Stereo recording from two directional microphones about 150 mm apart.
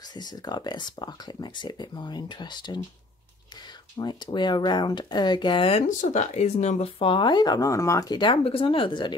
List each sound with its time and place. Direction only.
0.1 s speech: 25° left (ahead or behind)
4.0 s speech: 30° left (ahead or behind)
5.9 s speech: 55° left (ahead or behind); by 9.1 s 35° left (ahead or behind)